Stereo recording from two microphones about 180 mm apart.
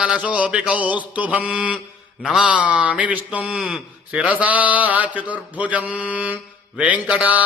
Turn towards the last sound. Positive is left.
turn(degrees=-5)  # may be behind; listen again after turning